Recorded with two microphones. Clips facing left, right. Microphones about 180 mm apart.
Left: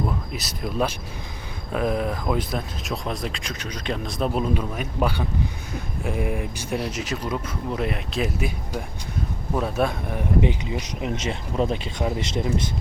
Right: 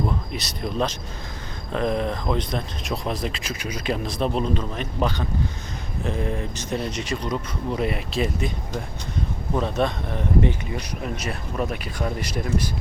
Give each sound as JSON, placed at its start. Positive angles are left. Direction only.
{"t": 0.3, "sound": "speech", "side_deg": 5}